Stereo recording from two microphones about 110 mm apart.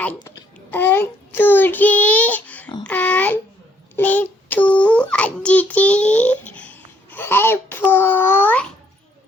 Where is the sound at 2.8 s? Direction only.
15° left (ahead or behind).